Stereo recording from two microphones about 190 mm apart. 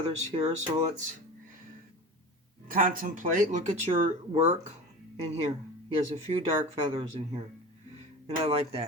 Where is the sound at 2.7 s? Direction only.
45° right (ahead or behind).